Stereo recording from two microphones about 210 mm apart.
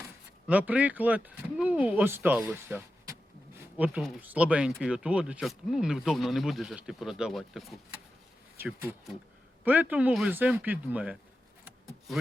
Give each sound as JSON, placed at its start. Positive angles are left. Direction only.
{"t": 0.4, "sound": "speech", "side_deg": -5}